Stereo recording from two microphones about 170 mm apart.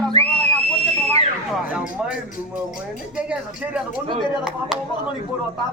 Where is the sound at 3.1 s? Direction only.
5° right (ahead or behind).